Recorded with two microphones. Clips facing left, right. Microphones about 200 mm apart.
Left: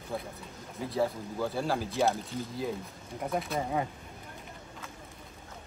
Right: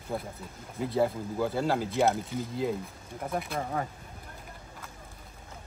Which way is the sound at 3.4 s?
5° left (ahead or behind).